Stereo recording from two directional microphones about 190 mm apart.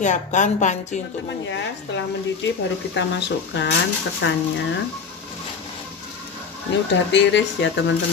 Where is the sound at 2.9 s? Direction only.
70° left (ahead or behind).